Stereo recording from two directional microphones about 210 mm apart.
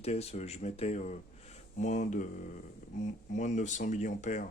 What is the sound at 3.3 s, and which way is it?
Speech, 35° left (ahead or behind).